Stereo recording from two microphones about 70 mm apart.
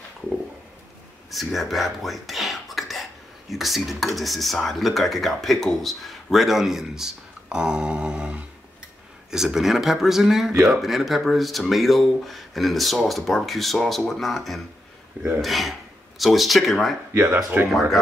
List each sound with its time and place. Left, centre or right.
1.3 s speech: centre
17.1 s speech: right